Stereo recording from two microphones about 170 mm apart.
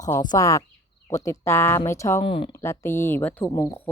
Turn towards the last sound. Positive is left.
turn(degrees=15)  # may be behind; listen again after turning